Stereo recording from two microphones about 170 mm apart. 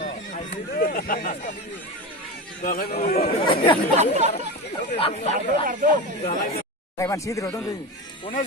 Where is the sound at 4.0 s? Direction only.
40° right (ahead or behind).